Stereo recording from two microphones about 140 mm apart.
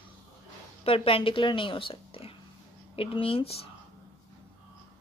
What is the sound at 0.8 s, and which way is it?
A woman's voice, 45° left (ahead or behind).